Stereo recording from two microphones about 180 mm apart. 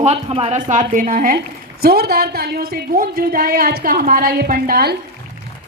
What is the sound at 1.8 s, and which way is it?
A woman's voice, 60° right (ahead or behind).